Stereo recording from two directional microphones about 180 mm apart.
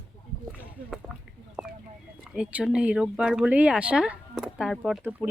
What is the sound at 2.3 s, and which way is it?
Speech, 5° right (ahead or behind).